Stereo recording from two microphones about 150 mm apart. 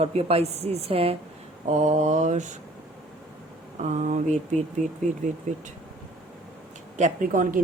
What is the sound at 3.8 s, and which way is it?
Speech, 50° right (ahead or behind).